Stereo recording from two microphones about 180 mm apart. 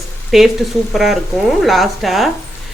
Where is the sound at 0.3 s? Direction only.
Centre (ahead or behind).